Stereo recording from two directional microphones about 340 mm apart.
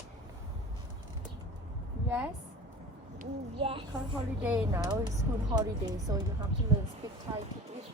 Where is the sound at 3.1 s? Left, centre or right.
Centre.